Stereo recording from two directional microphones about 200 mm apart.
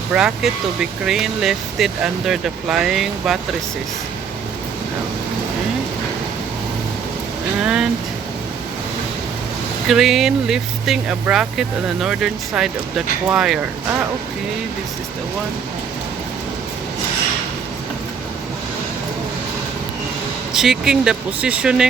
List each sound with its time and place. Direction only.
0.1 s speech: 5° right (ahead or behind)
7.6 s speech: 5° right (ahead or behind)
9.9 s speech: centre (ahead or behind)
20.5 s speech: centre (ahead or behind)